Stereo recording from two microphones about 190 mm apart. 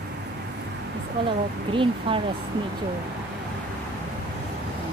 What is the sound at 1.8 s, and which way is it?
Speech, 25° right (ahead or behind).